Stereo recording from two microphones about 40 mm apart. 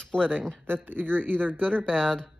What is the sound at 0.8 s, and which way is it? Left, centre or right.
Speech, right.